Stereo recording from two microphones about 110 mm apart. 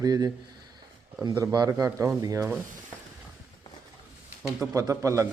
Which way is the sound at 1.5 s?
35° right (ahead or behind).